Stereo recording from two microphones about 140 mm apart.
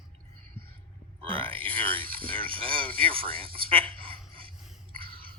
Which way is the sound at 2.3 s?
40° right (ahead or behind).